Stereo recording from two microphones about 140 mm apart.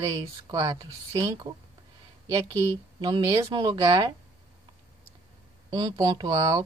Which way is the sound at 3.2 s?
25° right (ahead or behind).